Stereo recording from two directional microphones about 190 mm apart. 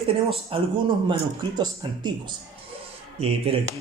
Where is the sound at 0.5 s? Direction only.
25° right (ahead or behind).